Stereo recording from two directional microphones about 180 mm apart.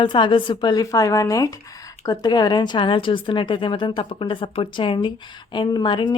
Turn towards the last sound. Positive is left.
turn(degrees=25)  # may be behind; listen again after turning